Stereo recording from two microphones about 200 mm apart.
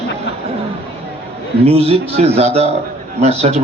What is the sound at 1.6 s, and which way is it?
A woman's voice, 30° right (ahead or behind).